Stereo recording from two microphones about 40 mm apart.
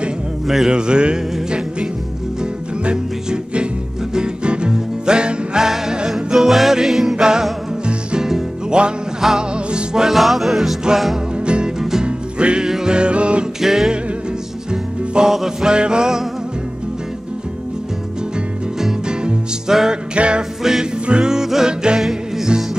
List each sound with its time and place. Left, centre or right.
0.7 s music: right
2.8 s music: right
8.3 s music: centre
10.0 s music: centre
11.4 s music: right
13.6 s music: centre
14.7 s music: centre
15.7 s music: right
19.7 s music: centre
20.2 s music: right; by 22.7 s centre